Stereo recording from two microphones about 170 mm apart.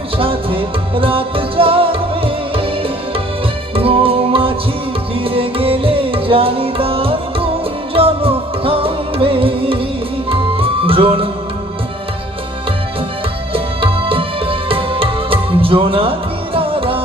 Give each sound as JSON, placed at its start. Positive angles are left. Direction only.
{"t": 0.2, "sound": "music", "side_deg": -30}
{"t": 3.8, "sound": "music", "side_deg": -35}
{"t": 13.5, "sound": "music", "side_deg": -30}